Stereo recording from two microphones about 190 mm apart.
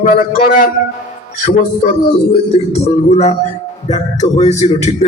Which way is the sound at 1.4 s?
45° left (ahead or behind).